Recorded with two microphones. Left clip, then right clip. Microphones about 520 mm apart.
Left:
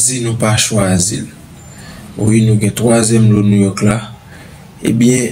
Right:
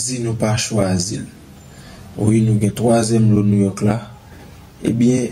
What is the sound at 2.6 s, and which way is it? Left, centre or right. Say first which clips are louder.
Speech: left 2 dB; right.